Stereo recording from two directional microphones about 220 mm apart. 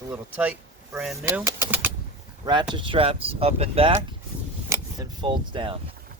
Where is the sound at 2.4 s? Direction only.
20° right (ahead or behind).